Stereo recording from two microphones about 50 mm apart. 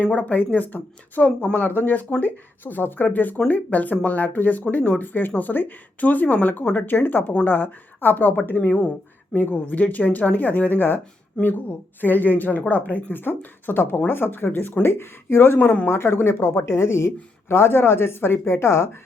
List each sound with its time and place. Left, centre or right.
0.0 s a woman's voice: left
11.4 s speech: centre
11.9 s a woman's voice: left